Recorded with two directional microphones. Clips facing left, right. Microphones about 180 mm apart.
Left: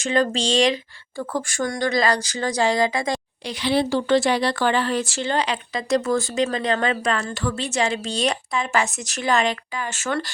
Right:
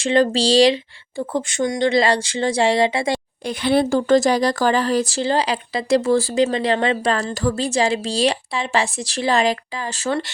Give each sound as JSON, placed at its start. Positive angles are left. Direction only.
{"t": 0.0, "sound": "speech", "side_deg": -30}
{"t": 3.4, "sound": "speech", "side_deg": -50}